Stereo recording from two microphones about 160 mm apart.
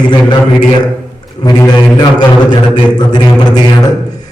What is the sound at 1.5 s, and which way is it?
A man's voice, 25° left (ahead or behind).